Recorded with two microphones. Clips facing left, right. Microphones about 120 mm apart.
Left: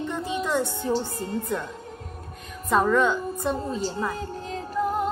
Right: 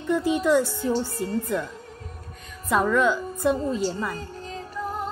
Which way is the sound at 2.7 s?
5° right (ahead or behind).